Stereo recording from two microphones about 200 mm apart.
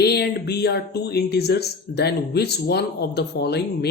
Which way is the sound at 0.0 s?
55° left (ahead or behind).